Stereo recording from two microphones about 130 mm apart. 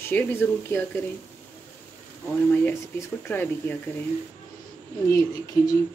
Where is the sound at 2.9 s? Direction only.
15° left (ahead or behind).